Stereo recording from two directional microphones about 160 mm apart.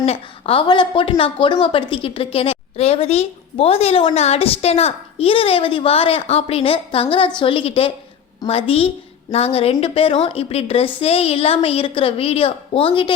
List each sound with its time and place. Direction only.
0.0 s a woman's voice: 40° left (ahead or behind)